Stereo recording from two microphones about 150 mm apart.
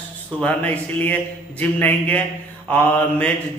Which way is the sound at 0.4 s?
10° left (ahead or behind).